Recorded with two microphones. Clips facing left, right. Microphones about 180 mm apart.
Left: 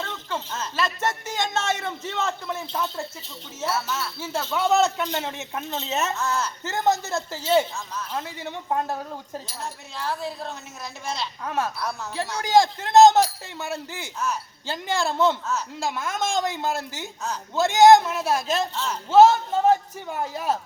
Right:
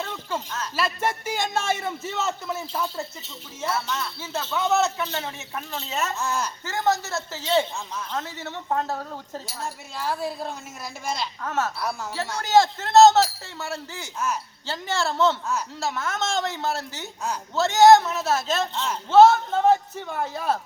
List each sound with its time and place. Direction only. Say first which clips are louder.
0.0 s a sound: right 1 dB; 10° right (ahead or behind)
0.8 s a man's voice: right 1 dB; 10° right (ahead or behind)
3.6 s speech: even; 5° left (ahead or behind)
6.1 s a man's voice: left 1 dB; 15° right (ahead or behind)
6.7 s speech: left 1 dB; 20° left (ahead or behind)
10.0 s a man's voice: right 2 dB; 10° right (ahead or behind)
11.4 s speech: even; 15° left (ahead or behind)